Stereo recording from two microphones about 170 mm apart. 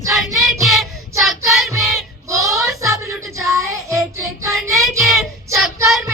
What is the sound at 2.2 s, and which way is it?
Child singing, 20° right (ahead or behind).